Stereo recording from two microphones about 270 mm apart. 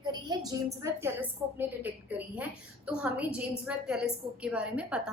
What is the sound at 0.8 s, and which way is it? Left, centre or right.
A woman's voice, centre.